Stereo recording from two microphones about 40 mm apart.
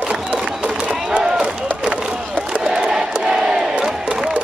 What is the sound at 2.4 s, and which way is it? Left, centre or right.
Crowd, right.